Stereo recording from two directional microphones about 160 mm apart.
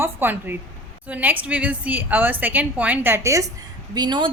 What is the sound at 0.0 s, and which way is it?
A woman's voice, 15° right (ahead or behind).